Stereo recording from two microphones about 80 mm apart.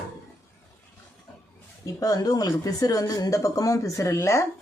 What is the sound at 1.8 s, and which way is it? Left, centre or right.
Speech, left.